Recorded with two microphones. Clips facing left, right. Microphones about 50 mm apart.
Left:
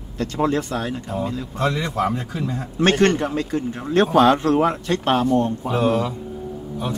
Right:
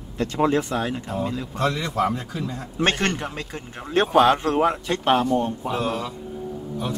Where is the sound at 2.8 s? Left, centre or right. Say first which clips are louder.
Left 6 dB; centre.